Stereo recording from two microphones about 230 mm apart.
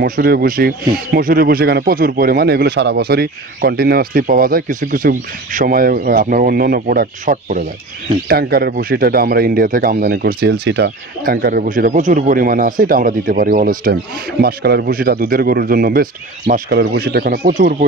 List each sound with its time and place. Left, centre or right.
0.0 s speech: right